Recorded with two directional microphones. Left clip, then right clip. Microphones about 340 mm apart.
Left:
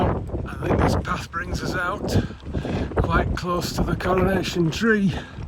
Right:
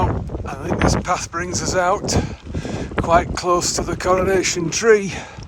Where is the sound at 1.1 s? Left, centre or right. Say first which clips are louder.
Right 6 dB; centre.